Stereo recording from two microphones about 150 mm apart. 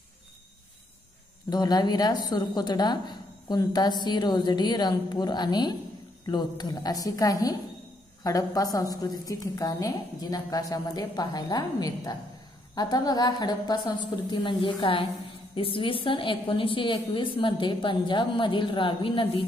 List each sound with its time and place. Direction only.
1.5 s a woman's voice: 25° left (ahead or behind)